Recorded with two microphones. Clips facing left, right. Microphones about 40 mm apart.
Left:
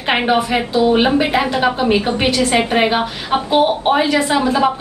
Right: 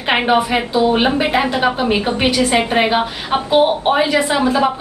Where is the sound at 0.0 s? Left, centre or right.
Centre.